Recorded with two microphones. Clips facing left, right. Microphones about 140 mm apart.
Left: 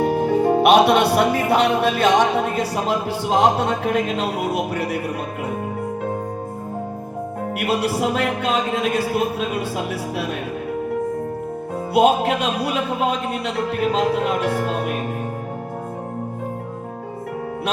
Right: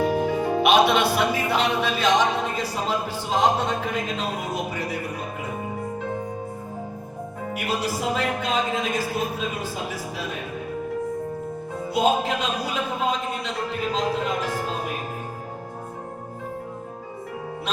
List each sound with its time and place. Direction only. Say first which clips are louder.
0.0 s music: left 5 dB; 45° left (ahead or behind); by 4.9 s 65° left (ahead or behind)
7.5 s music: left 5 dB; 65° left (ahead or behind)
11.9 s music: left 6 dB; 65° left (ahead or behind)